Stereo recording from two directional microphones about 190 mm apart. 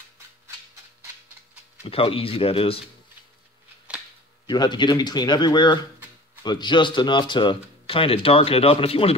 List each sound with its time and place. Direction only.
1.9 s speech: 30° left (ahead or behind)
4.5 s speech: 25° left (ahead or behind)